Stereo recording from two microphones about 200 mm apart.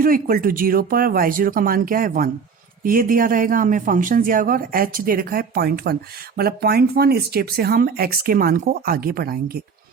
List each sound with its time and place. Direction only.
0.0 s speech: 45° right (ahead or behind)